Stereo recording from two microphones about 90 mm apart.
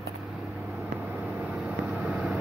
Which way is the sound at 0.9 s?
15° right (ahead or behind).